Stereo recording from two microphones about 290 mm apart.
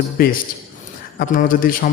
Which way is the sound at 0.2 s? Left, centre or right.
Left.